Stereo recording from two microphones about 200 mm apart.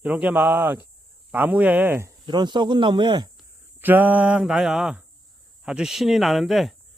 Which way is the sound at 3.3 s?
10° right (ahead or behind).